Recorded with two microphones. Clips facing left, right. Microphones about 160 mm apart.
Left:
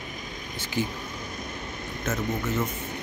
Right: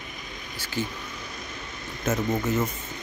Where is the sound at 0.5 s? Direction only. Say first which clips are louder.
Left 2 dB; 20° left (ahead or behind).